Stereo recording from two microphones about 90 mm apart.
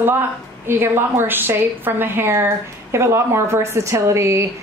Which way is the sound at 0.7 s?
25° right (ahead or behind).